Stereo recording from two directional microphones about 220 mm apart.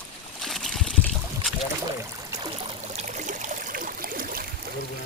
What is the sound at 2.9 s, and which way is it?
Trickle, 30° right (ahead or behind).